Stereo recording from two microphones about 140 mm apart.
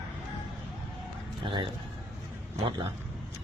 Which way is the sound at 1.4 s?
40° right (ahead or behind).